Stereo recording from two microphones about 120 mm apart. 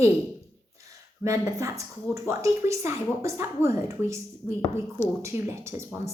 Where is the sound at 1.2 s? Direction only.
25° right (ahead or behind).